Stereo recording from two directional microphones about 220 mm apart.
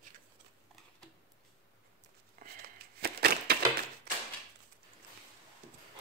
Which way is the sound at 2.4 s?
40° right (ahead or behind).